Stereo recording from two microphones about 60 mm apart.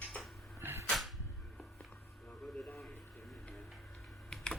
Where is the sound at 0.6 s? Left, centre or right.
Right.